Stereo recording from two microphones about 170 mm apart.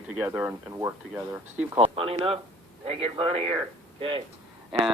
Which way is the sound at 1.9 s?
35° right (ahead or behind).